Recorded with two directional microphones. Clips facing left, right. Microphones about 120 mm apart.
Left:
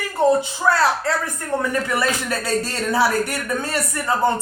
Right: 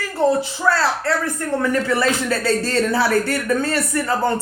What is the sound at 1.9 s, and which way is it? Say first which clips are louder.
Speech: right 3 dB; 20° left (ahead or behind).